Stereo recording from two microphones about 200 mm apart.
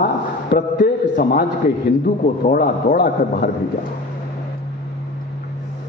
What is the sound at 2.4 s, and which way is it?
A man's voice, 45° left (ahead or behind).